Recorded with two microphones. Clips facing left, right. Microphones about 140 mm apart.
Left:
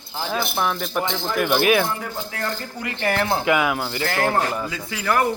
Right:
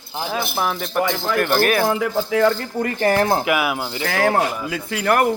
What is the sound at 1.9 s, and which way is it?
Speech, 90° right.